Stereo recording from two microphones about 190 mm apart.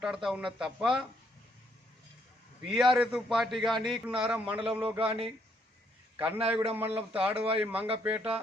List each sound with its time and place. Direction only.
0.0 s a man's voice: centre (ahead or behind)
2.6 s a man's voice: centre (ahead or behind)
4.5 s a man's voice: 30° right (ahead or behind)
6.1 s a man's voice: 10° right (ahead or behind)
6.8 s a man's voice: 30° right (ahead or behind)
7.6 s speech: 10° right (ahead or behind)